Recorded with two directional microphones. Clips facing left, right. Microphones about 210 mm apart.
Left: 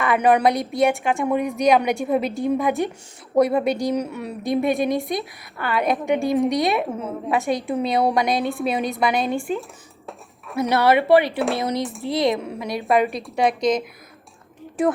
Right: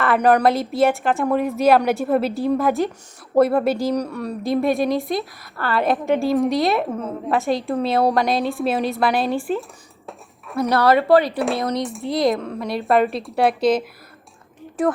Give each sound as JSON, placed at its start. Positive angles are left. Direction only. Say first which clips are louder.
{"t": 0.0, "sound": "a woman's voice", "louder": "right 1 dB", "side_deg": 0}
{"t": 10.1, "sound": "a sound", "louder": "right 1 dB", "side_deg": 0}
{"t": 10.8, "sound": "speech", "louder": "right 1 dB", "side_deg": 25}
{"t": 11.3, "sound": "a woman's voice", "louder": "right 1 dB", "side_deg": 0}